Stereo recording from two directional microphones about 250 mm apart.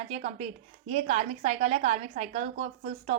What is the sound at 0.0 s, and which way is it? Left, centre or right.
A woman's voice, right.